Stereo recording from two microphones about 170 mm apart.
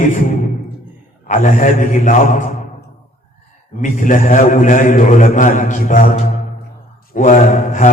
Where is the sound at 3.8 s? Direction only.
50° left (ahead or behind).